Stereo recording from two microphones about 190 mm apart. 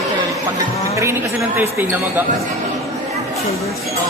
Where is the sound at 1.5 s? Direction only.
10° right (ahead or behind).